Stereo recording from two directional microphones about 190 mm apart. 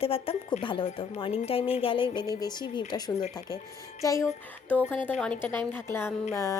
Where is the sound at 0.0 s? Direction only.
30° left (ahead or behind).